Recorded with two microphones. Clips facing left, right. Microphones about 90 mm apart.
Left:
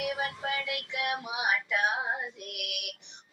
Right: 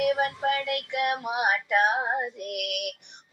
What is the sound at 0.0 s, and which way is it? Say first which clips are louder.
Child singing: right 8 dB; 50° right (ahead or behind).